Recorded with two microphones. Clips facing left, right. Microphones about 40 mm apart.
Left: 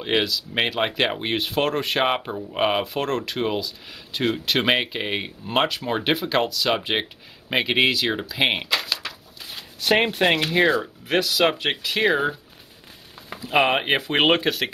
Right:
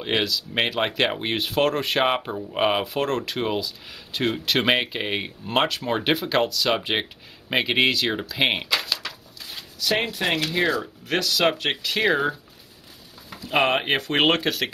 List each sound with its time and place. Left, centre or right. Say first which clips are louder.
0.0 s speech: left 1 dB; centre
9.8 s speech: left 5 dB; left
10.3 s speech: left 3 dB; left
11.1 s speech: left 1 dB; centre
13.4 s speech: left 1 dB; centre